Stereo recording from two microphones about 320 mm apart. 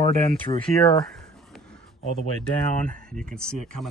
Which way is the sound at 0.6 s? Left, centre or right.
Centre.